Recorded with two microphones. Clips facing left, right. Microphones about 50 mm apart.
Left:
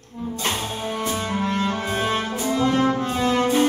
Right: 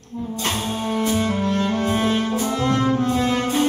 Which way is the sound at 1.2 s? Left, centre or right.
Centre.